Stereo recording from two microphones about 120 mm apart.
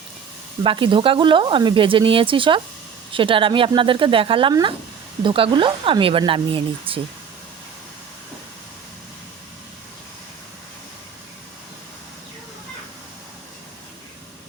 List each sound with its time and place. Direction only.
0.6 s speech: 45° right (ahead or behind)